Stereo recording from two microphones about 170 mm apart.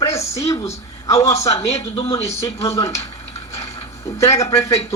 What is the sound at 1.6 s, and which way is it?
Speech, 35° left (ahead or behind).